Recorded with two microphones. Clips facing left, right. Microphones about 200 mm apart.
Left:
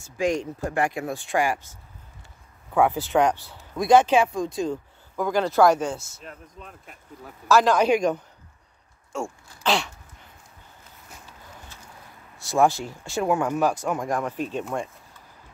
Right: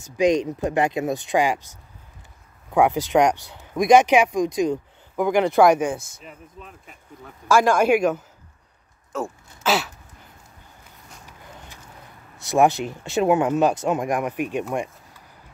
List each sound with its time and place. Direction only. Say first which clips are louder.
0.0 s speech: right 6 dB; 20° right (ahead or behind)
6.2 s speech: even; centre (ahead or behind)
7.4 s speech: right 1 dB; 10° right (ahead or behind)
12.4 s speech: right 3 dB; 20° right (ahead or behind)
14.7 s a sound: right 3 dB; 15° right (ahead or behind)